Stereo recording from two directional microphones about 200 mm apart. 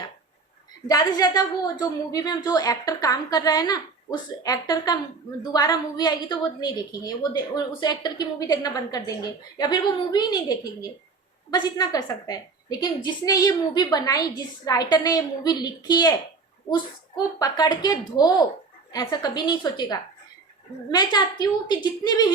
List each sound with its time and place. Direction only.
0.9 s a woman's voice: 20° left (ahead or behind)